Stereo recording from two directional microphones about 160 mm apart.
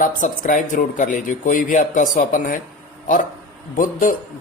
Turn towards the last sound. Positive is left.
turn(degrees=55)  # may be behind; listen again after turning